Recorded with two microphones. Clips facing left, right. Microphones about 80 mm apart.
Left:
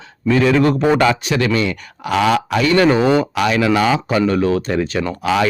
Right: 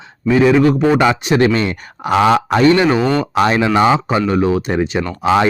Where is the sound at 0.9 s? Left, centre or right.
Right.